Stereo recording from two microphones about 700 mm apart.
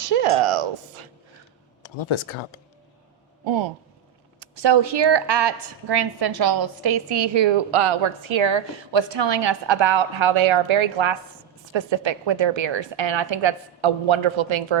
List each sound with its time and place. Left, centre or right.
0.1 s speech: right
1.8 s speech: left
4.4 s a woman's voice: right